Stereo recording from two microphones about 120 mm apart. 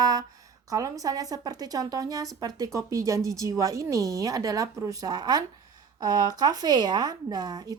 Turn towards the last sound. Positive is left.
turn(degrees=-30)  # may be behind; listen again after turning